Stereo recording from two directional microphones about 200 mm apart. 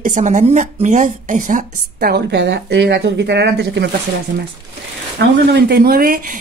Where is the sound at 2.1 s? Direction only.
60° right (ahead or behind).